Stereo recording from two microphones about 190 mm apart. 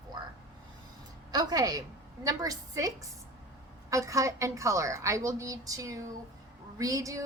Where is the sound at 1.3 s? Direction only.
20° right (ahead or behind).